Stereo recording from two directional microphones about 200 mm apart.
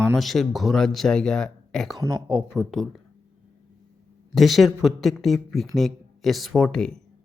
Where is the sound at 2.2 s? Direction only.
5° right (ahead or behind).